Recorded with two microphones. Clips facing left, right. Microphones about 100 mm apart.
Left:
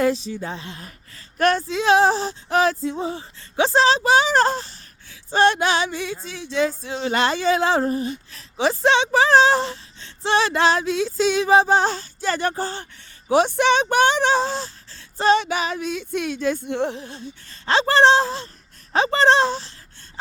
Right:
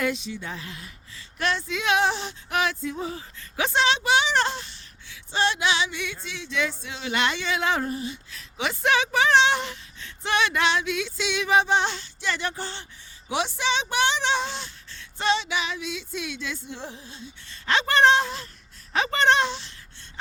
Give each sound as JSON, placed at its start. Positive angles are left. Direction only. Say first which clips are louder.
{"t": 0.0, "sound": "speech", "louder": "left 7 dB", "side_deg": 35}
{"t": 0.9, "sound": "speech", "louder": "left 1 dB", "side_deg": 45}
{"t": 1.6, "sound": "speech", "louder": "left 5 dB", "side_deg": 35}
{"t": 15.4, "sound": "female singing", "louder": "left 6 dB", "side_deg": 45}
{"t": 17.7, "sound": "speech", "louder": "left 4 dB", "side_deg": 30}